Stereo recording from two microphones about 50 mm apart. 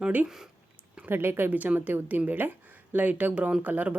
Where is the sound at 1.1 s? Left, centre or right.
Right.